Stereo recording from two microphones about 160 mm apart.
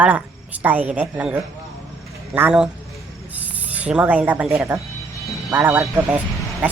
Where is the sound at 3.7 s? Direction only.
10° right (ahead or behind).